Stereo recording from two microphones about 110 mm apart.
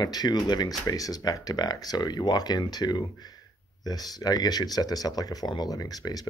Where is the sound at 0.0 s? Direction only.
40° left (ahead or behind).